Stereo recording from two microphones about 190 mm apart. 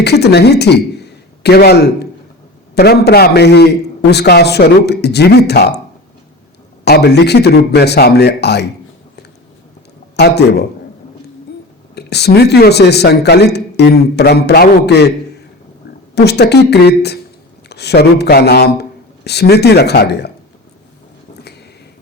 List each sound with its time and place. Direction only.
0.0 s a man's voice: 60° left (ahead or behind)
6.8 s speech: 60° left (ahead or behind)
10.2 s speech: 60° left (ahead or behind)
11.9 s speech: 60° left (ahead or behind)
16.1 s a man's voice: 60° left (ahead or behind)